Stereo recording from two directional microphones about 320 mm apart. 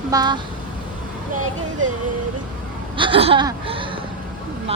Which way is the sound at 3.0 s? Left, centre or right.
Centre.